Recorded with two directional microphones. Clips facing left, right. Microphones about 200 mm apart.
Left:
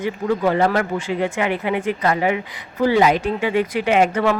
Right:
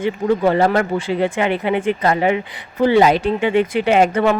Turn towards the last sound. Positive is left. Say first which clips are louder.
# right 2 dB
turn(degrees=-30)  # may be behind; listen again after turning